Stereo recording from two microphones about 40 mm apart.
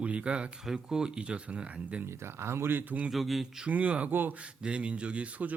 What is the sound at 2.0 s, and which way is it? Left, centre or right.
Speech, right.